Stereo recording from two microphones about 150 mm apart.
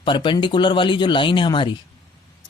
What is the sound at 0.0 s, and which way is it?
Speech, 35° left (ahead or behind).